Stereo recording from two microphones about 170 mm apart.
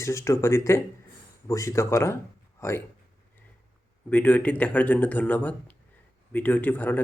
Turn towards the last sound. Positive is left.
turn(degrees=10)  # may be behind; listen again after turning